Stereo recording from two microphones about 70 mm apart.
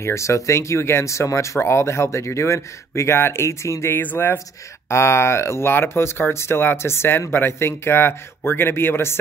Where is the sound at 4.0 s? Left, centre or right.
Left.